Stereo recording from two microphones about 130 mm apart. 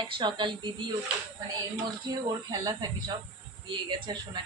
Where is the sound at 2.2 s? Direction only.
30° right (ahead or behind).